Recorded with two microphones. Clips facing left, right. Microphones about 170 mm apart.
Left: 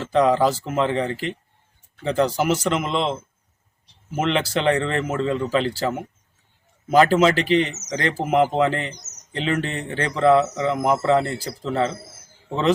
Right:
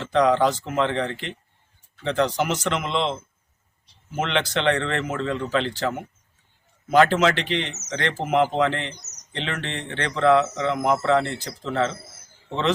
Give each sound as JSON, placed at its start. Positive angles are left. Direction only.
{"t": 0.0, "sound": "speech", "side_deg": 5}
{"t": 8.7, "sound": "speech", "side_deg": 40}
{"t": 9.3, "sound": "speech", "side_deg": 5}